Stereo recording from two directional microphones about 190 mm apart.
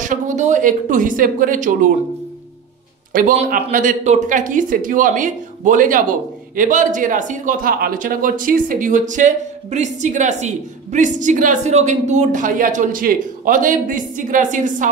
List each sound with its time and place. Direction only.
0.0 s speech: 40° right (ahead or behind)
3.1 s speech: 45° right (ahead or behind)